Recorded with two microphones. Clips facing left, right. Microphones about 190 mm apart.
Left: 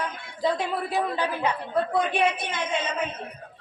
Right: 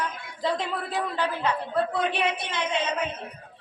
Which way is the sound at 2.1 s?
50° left (ahead or behind).